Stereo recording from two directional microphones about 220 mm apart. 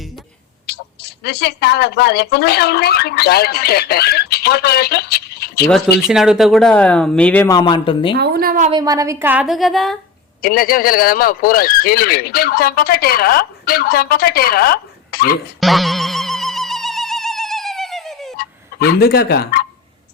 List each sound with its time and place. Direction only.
0.7 s speech: 50° left (ahead or behind)
6.1 s speech: centre (ahead or behind)
7.5 s speech: 20° left (ahead or behind)
8.1 s speech: 45° right (ahead or behind)
8.7 s a woman's voice: 15° right (ahead or behind); by 10.0 s centre (ahead or behind)
10.4 s speech: 40° left (ahead or behind)
15.6 s a sound: centre (ahead or behind)
18.3 s fowl: 45° left (ahead or behind)